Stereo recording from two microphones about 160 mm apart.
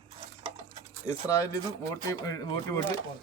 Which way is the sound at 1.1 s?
20° left (ahead or behind).